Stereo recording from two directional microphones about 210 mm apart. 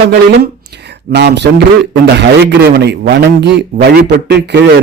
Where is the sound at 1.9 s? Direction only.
55° right (ahead or behind).